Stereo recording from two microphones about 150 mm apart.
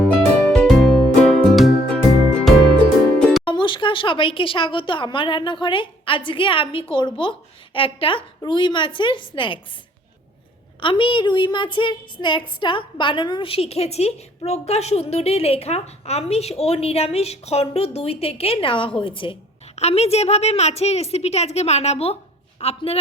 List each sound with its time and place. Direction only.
0.0 s music: 5° left (ahead or behind)
3.2 s music: 5° left (ahead or behind)
3.4 s a woman's voice: 35° left (ahead or behind)
10.8 s a woman's voice: 35° left (ahead or behind)